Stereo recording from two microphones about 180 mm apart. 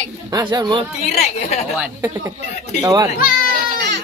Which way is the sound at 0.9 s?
40° left (ahead or behind).